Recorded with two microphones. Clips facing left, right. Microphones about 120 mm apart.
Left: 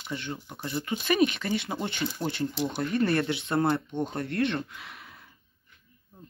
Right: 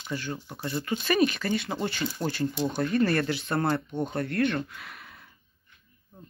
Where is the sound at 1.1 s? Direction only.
15° left (ahead or behind).